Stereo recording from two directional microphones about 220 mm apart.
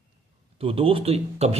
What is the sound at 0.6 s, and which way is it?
Speech, 25° right (ahead or behind).